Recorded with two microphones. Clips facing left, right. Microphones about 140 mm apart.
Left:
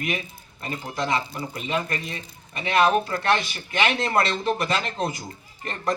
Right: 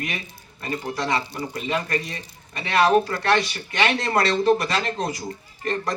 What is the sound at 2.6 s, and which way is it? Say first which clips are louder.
Speech: right 2 dB; 35° right (ahead or behind).